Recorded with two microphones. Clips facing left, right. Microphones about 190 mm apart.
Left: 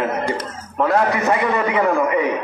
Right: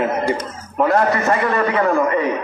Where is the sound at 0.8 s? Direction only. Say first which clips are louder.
Right 1 dB; 5° right (ahead or behind).